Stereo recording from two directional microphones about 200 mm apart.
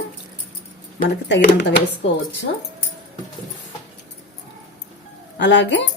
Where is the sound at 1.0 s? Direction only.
60° left (ahead or behind).